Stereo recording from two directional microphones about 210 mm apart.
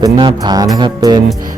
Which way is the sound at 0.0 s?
20° right (ahead or behind).